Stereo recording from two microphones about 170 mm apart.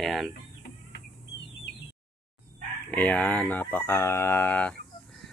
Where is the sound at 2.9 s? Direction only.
10° left (ahead or behind).